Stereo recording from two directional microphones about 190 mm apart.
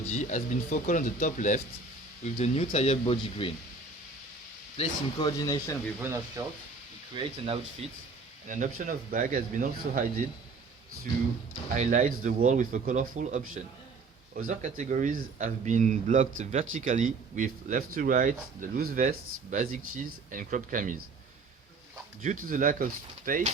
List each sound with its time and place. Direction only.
0.1 s speech: 40° left (ahead or behind)
4.8 s speech: 20° left (ahead or behind)
6.0 s speech: 15° right (ahead or behind)
7.1 s speech: 25° right (ahead or behind)
8.4 s speech: 40° right (ahead or behind)
11.7 s a man's voice: 40° right (ahead or behind)
22.2 s speech: 45° right (ahead or behind)